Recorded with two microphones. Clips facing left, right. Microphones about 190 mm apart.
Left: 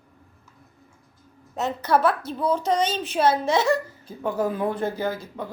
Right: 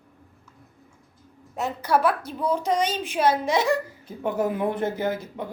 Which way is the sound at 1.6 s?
10° right (ahead or behind).